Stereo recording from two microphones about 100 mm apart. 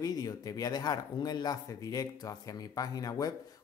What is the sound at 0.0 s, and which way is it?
Speech, 40° left (ahead or behind).